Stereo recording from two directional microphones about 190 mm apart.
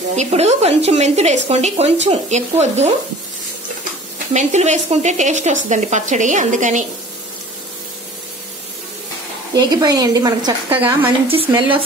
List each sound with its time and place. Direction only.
0.1 s a woman's voice: 35° right (ahead or behind)
4.3 s a woman's voice: 35° right (ahead or behind)
9.6 s speech: 20° right (ahead or behind)
10.8 s speech: 10° right (ahead or behind)
11.2 s speech: 30° right (ahead or behind)